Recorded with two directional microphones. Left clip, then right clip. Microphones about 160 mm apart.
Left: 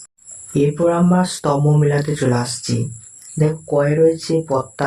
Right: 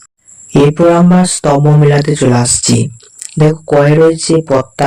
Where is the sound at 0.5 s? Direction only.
45° right (ahead or behind).